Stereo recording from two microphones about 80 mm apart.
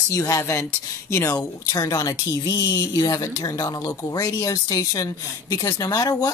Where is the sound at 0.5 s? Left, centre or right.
Left.